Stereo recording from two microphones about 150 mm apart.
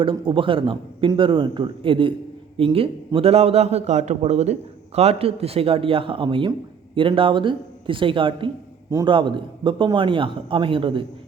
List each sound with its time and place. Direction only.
0.0 s a man's voice: 35° right (ahead or behind)